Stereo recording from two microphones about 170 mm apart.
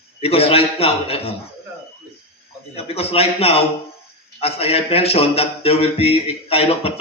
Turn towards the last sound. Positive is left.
turn(degrees=35)  # may be behind; listen again after turning